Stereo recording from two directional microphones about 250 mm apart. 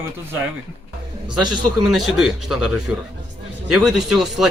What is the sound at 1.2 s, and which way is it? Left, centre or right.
Speech, centre.